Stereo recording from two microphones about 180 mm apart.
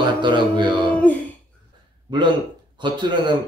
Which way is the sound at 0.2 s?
25° right (ahead or behind).